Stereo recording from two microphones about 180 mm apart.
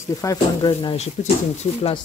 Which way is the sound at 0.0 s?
20° left (ahead or behind).